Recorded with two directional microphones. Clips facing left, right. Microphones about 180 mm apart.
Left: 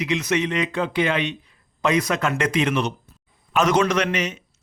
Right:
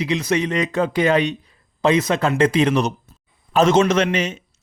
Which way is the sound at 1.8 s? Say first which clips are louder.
Right 4 dB; 25° right (ahead or behind).